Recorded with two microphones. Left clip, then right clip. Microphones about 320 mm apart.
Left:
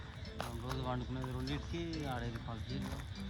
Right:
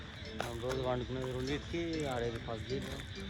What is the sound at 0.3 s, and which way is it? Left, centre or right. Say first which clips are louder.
Speech: right 6 dB; centre.